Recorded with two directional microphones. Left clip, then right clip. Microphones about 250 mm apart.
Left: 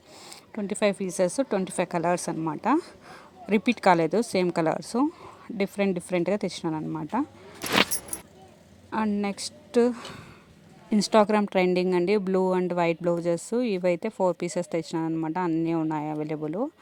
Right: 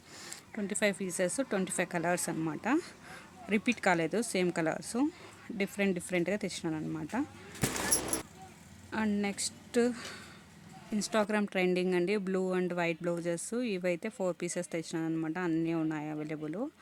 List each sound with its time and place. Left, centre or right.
0.3 s a woman's voice: centre
8.9 s a woman's voice: centre